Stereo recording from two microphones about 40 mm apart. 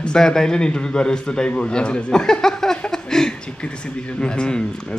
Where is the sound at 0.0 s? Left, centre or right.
Centre.